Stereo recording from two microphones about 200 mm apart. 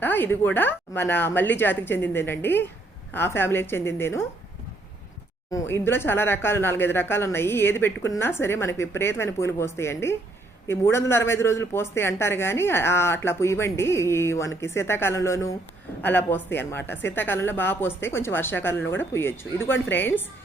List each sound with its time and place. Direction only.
0.0 s a woman's voice: 10° left (ahead or behind)
5.5 s a woman's voice: 15° left (ahead or behind)